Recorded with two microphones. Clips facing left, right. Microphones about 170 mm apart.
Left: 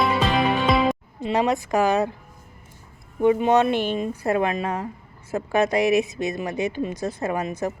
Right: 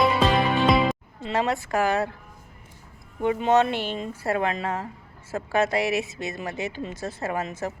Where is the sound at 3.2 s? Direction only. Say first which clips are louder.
Left 3 dB; 15° left (ahead or behind).